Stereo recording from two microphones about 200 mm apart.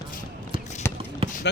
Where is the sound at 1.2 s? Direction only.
30° right (ahead or behind).